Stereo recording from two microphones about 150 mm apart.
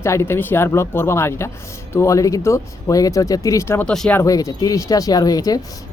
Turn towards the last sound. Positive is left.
turn(degrees=25)  # may be behind; listen again after turning